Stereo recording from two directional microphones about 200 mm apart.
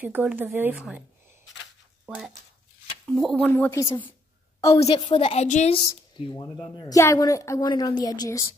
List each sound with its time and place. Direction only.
0.0 s speech: 5° right (ahead or behind)
2.0 s speech: centre (ahead or behind)
4.7 s a woman's voice: 25° left (ahead or behind)